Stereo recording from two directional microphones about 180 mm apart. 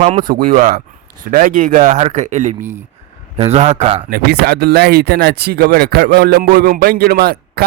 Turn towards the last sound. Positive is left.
turn(degrees=-60)  # may be behind; listen again after turning